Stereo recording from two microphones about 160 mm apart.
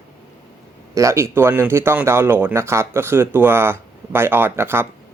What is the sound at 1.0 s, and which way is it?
A man's voice, 20° right (ahead or behind).